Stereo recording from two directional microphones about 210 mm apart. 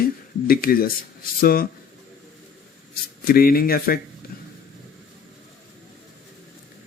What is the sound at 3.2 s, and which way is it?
Speech, 45° left (ahead or behind).